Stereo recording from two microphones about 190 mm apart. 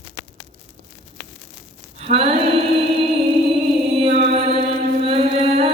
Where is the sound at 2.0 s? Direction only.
30° right (ahead or behind).